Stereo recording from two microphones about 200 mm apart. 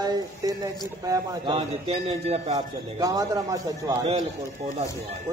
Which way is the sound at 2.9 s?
15° right (ahead or behind).